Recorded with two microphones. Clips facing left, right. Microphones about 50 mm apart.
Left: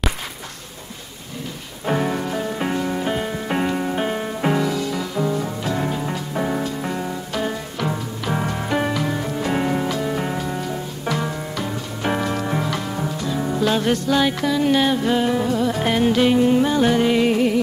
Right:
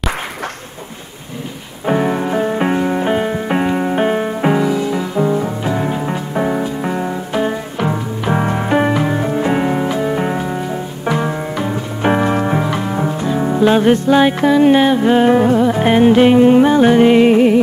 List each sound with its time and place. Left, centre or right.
1.9 s rain on surface: centre; by 15.6 s right
15.6 s music: right